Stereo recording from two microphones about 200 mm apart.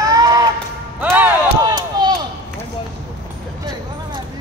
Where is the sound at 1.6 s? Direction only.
20° right (ahead or behind).